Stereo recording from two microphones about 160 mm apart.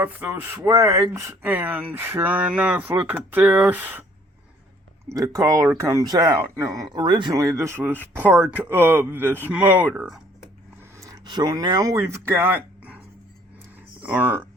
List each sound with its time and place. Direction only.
0.0 s speech: 10° right (ahead or behind)
5.0 s speech: 20° right (ahead or behind)
10.9 s speech: 20° right (ahead or behind)
14.0 s speech: 10° right (ahead or behind)